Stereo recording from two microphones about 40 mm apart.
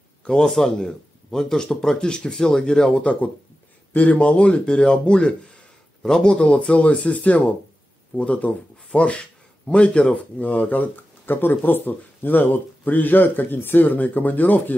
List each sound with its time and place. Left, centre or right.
0.2 s a man's voice: left
0.6 s speech: centre
6.4 s speech: left